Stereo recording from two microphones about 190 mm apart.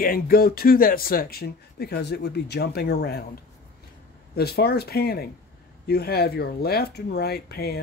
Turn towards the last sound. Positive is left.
turn(degrees=55)  # may be behind; listen again after turning